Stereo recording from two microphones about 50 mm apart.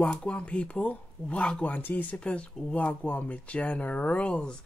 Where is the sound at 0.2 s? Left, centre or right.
Left.